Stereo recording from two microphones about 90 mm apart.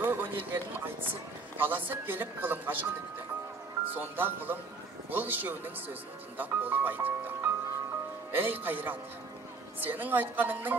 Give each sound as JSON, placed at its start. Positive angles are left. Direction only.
{"t": 0.0, "sound": "a sound", "side_deg": -20}
{"t": 1.6, "sound": "speech", "side_deg": -20}
{"t": 3.8, "sound": "speech", "side_deg": -20}